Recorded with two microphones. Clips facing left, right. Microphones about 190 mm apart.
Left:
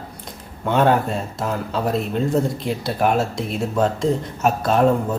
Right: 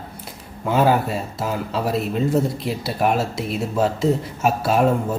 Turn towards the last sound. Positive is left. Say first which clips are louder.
# left 1 dB
turn(degrees=-5)  # may be behind; listen again after turning